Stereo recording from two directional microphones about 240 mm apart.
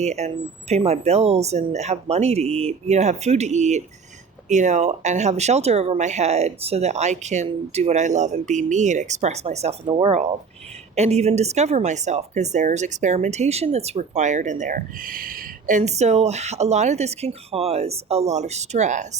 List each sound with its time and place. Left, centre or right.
0.0 s speech: right